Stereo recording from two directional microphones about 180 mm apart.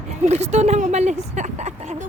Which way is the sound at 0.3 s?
35° right (ahead or behind).